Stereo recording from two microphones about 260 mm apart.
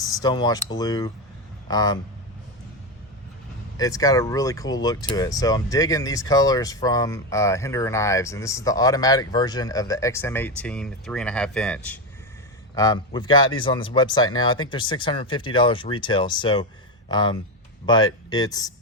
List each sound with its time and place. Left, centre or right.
0.0 s speech: centre
3.8 s speech: centre
12.7 s speech: centre